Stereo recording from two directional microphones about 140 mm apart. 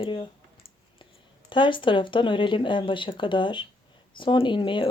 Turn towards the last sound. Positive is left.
turn(degrees=35)  # may be behind; listen again after turning